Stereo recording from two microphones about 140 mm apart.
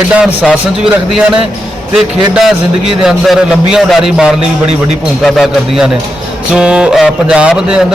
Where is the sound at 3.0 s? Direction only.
5° right (ahead or behind).